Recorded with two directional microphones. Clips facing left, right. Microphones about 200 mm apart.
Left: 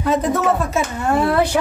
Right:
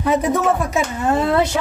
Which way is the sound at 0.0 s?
15° right (ahead or behind).